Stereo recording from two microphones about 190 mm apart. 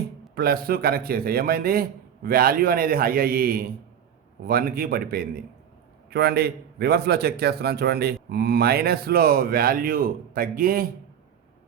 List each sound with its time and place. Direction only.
0.3 s a man's voice: 50° right (ahead or behind)